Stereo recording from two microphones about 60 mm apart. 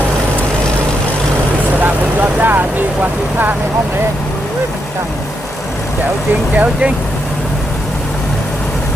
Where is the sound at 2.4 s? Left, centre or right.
Right.